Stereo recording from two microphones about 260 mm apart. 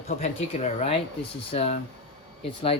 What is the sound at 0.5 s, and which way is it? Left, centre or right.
Speech, left.